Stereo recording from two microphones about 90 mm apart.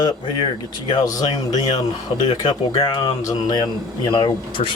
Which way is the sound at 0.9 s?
45° left (ahead or behind).